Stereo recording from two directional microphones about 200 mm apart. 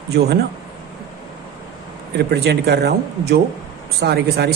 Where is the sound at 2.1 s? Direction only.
55° right (ahead or behind).